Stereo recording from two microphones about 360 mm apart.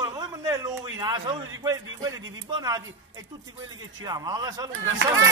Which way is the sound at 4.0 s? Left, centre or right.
Centre.